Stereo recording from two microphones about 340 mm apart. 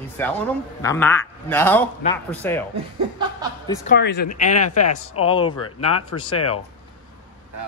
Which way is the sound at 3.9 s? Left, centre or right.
Left.